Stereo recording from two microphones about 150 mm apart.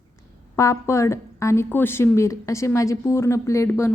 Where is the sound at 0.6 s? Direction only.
20° left (ahead or behind).